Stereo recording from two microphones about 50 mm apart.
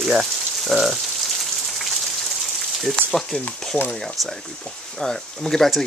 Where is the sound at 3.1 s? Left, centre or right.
Centre.